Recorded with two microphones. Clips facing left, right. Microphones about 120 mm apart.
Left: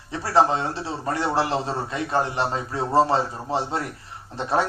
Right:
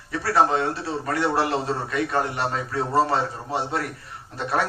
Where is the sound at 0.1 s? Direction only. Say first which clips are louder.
Left 1 dB; 25° left (ahead or behind).